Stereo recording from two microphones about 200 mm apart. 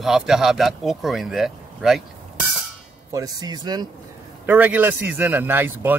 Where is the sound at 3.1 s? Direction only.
20° right (ahead or behind).